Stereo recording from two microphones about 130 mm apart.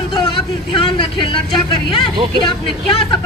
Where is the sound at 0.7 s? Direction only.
40° left (ahead or behind).